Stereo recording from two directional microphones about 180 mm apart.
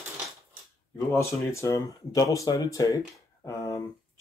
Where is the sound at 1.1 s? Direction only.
15° left (ahead or behind).